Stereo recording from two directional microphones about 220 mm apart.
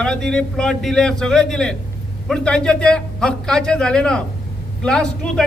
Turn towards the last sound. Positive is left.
turn(degrees=5)  # may be behind; listen again after turning